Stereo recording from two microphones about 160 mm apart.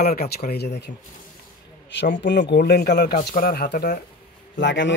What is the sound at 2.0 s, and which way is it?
Speech, 90° left.